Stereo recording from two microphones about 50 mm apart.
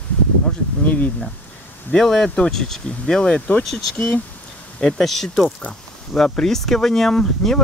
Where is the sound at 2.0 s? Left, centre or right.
Centre.